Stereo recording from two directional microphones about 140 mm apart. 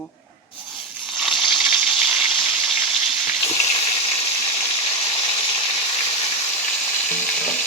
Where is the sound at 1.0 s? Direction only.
Centre (ahead or behind).